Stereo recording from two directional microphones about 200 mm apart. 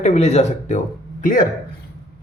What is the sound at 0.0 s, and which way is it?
Speech, 35° left (ahead or behind).